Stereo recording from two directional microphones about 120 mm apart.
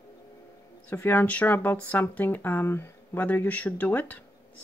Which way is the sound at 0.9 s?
20° left (ahead or behind).